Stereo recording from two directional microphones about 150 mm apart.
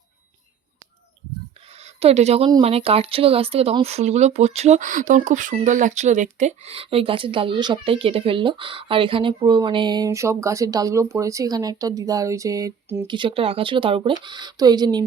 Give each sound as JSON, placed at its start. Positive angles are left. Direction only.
{"t": 1.8, "sound": "speech", "side_deg": -45}
{"t": 13.1, "sound": "speech", "side_deg": -35}